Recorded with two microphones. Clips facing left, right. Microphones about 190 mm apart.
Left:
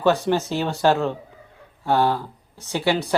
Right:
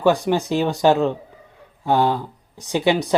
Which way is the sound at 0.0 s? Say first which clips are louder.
Right 2 dB; 15° right (ahead or behind).